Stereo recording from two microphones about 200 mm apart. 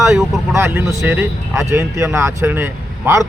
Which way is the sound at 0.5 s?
10° right (ahead or behind).